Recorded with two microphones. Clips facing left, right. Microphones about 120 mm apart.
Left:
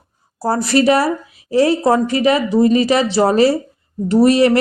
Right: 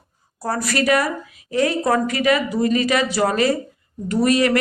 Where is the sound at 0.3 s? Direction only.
30° left (ahead or behind).